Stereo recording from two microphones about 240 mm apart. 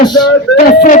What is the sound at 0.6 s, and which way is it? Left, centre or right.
Speech, left.